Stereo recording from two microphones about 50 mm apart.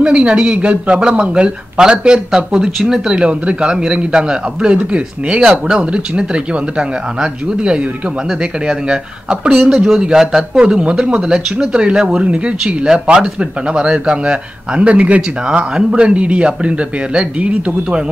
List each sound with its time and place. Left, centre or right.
0.0 s speech: right
3.2 s a man's voice: right
10.6 s a man's voice: right